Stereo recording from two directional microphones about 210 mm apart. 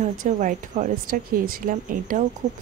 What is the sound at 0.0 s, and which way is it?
Speech, 35° right (ahead or behind).